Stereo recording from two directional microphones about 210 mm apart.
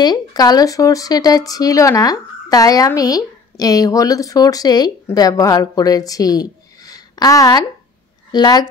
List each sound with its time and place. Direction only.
0.0 s a woman's voice: 20° left (ahead or behind)